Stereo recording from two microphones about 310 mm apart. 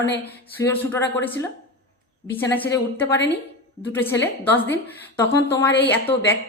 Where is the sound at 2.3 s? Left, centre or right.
Centre.